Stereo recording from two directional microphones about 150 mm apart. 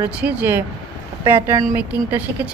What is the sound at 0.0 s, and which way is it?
Speech, 10° right (ahead or behind).